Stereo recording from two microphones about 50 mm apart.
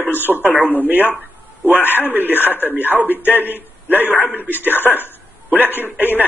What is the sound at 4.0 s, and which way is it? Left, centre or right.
A man's voice, left.